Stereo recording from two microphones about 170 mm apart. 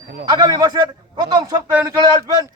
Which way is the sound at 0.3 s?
25° right (ahead or behind).